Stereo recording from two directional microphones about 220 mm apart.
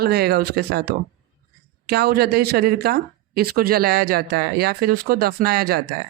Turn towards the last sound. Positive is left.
turn(degrees=-45)  # may be behind; listen again after turning